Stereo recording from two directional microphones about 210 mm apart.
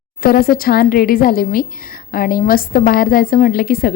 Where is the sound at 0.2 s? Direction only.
45° left (ahead or behind).